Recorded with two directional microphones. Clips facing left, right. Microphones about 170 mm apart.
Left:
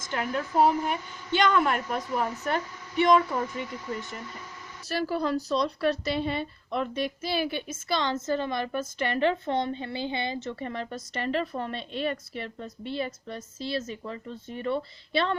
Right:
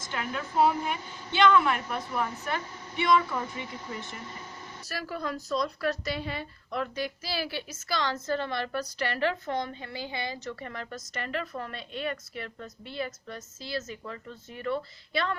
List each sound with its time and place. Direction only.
0.1 s a woman's voice: 45° left (ahead or behind)
4.9 s a woman's voice: 30° left (ahead or behind)